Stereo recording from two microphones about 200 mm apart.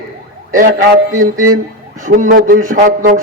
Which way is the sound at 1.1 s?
40° right (ahead or behind).